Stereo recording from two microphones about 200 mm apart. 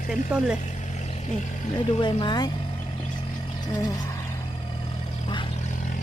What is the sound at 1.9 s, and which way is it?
Speech, 25° left (ahead or behind).